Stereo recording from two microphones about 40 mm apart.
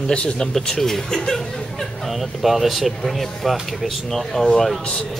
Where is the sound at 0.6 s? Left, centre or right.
Centre.